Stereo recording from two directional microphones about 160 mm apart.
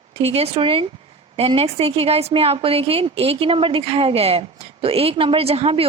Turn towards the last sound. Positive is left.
turn(degrees=-35)  # may be behind; listen again after turning